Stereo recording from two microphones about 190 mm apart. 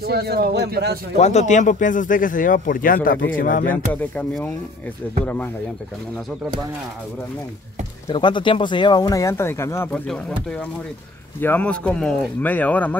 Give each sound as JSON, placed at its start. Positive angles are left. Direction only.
{"t": 0.0, "sound": "a man's voice", "side_deg": -55}
{"t": 1.1, "sound": "speech", "side_deg": 35}
{"t": 3.7, "sound": "speech", "side_deg": 10}
{"t": 8.1, "sound": "speech", "side_deg": 25}